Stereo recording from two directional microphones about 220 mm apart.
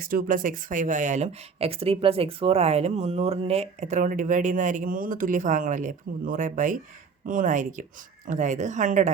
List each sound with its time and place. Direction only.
0.0 s speech: 40° right (ahead or behind)